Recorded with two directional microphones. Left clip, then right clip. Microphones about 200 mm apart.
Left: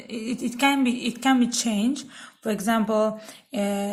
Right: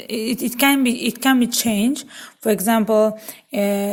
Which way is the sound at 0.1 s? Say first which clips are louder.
Right 7 dB; 45° right (ahead or behind).